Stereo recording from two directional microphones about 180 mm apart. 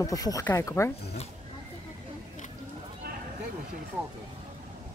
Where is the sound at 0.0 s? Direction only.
20° left (ahead or behind).